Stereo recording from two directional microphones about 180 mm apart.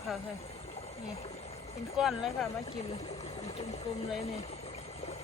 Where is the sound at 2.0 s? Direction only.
Centre (ahead or behind).